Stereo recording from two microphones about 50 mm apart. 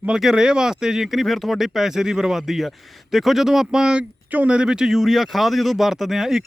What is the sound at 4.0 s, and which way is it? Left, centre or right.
Speech, right.